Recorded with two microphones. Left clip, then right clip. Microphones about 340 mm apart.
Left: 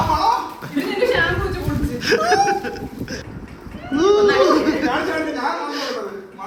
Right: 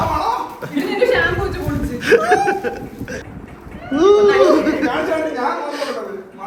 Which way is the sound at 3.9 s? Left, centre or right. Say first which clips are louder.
Right 3 dB; centre.